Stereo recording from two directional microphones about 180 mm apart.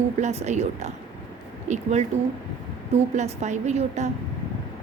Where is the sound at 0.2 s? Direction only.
40° right (ahead or behind).